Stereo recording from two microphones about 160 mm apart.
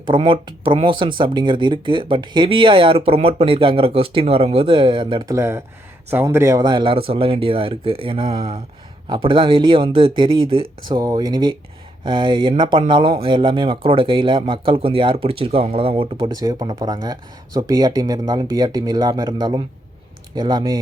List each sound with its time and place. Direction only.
0.0 s speech: 30° right (ahead or behind)
16.3 s speech: 25° right (ahead or behind)